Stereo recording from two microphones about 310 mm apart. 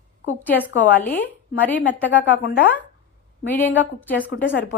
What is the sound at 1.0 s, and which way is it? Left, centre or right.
Speech, centre.